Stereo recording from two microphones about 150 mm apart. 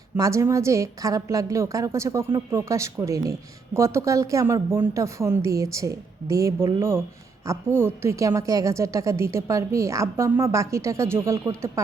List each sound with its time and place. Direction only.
0.2 s a woman's voice: 20° right (ahead or behind)